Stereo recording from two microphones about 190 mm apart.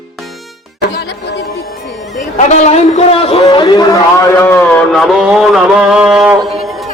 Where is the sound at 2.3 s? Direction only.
40° left (ahead or behind); by 6.4 s 5° right (ahead or behind).